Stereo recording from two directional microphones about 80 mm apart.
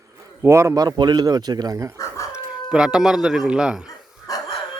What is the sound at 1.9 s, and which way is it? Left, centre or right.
Chicken, left.